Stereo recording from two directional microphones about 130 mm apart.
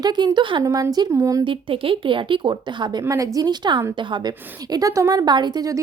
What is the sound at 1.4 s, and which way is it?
A woman's voice, 40° right (ahead or behind).